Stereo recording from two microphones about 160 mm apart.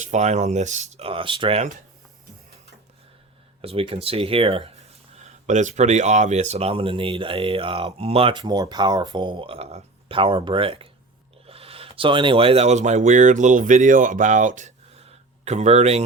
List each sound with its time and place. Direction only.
0.0 s speech: 50° right (ahead or behind)
3.6 s speech: 35° right (ahead or behind)
5.2 s speech: 50° right (ahead or behind)